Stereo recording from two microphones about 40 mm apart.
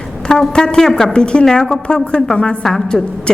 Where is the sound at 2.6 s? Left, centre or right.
Centre.